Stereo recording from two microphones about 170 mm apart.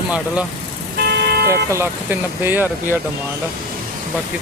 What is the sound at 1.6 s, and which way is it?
Speech, 15° right (ahead or behind).